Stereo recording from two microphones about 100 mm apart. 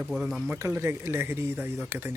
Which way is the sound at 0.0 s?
5° right (ahead or behind).